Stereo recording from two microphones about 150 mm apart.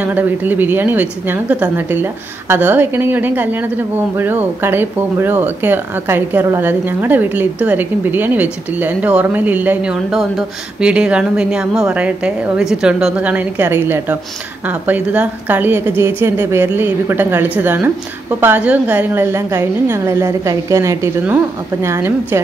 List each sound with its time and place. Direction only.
0.0 s speech: 10° right (ahead or behind)